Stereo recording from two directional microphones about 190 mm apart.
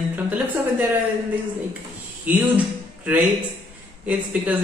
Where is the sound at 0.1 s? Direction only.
10° right (ahead or behind).